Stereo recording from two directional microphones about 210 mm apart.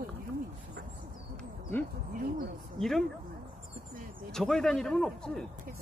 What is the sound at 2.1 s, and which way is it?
Speech, 45° right (ahead or behind).